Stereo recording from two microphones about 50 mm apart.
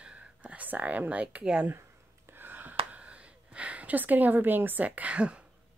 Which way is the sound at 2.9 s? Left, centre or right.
Right.